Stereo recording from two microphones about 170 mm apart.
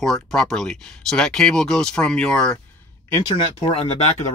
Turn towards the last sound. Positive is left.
turn(degrees=35)  # may be behind; listen again after turning